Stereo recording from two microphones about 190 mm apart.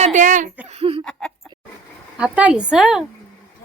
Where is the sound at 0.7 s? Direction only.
30° right (ahead or behind).